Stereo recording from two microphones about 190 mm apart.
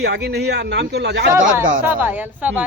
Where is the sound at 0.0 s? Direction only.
60° right (ahead or behind).